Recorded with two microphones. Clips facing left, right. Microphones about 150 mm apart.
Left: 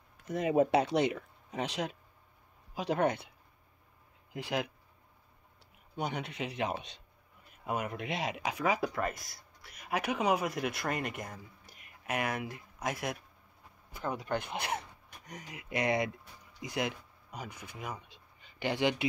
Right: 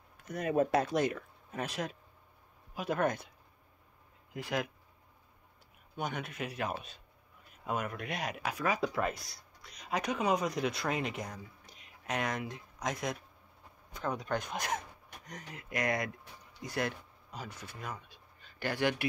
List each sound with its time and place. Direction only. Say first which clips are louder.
0.3 s speech: left 2 dB; 20° left (ahead or behind)
0.8 s speech: left 2 dB; 75° left (ahead or behind)
1.1 s speech: left 2 dB; 15° left (ahead or behind)
5.9 s speech: left 2 dB; 15° left (ahead or behind)
6.2 s speech: left 1 dB; 90° left
6.5 s speech: left 4 dB; 20° left (ahead or behind)
8.9 s speech: right 1 dB; centre (ahead or behind)
9.8 s speech: left 1 dB; 10° left (ahead or behind)
15.7 s speech: left 3 dB; 25° left (ahead or behind)
16.6 s speech: even; 15° left (ahead or behind)